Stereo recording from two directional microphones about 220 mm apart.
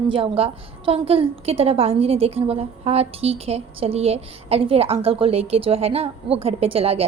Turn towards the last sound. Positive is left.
turn(degrees=-25)  # may be behind; listen again after turning